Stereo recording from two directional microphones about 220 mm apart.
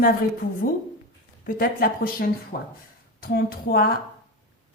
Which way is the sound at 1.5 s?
40° left (ahead or behind).